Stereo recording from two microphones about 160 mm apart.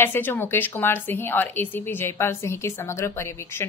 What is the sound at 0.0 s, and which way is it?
A woman's voice, 15° left (ahead or behind).